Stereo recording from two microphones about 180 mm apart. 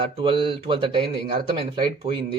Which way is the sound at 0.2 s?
30° right (ahead or behind).